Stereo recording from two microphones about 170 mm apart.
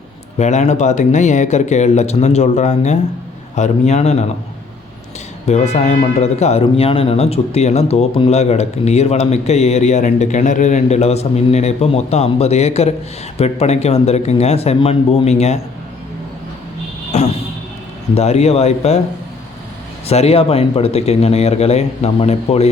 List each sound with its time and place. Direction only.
0.3 s speech: 40° left (ahead or behind)
5.5 s speech: 40° left (ahead or behind)
17.1 s vehicle: 40° left (ahead or behind)
18.1 s speech: 40° left (ahead or behind)
20.1 s speech: 35° left (ahead or behind)